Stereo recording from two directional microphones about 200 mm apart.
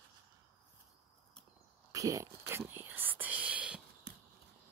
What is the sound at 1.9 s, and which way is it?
Whispering, 15° right (ahead or behind).